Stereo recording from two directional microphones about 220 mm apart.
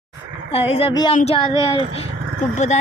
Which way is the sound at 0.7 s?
25° left (ahead or behind).